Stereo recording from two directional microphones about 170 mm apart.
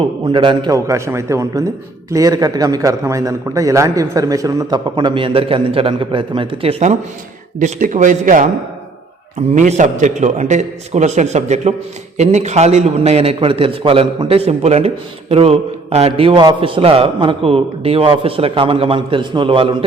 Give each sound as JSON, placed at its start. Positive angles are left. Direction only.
{"t": 0.0, "sound": "a man's voice", "side_deg": -30}
{"t": 9.6, "sound": "a man's voice", "side_deg": -45}